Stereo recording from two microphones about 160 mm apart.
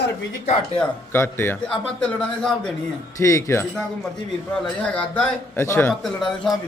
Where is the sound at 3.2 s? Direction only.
20° left (ahead or behind).